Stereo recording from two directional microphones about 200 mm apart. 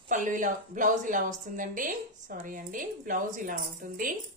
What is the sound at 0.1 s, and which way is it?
A woman's voice, 40° right (ahead or behind).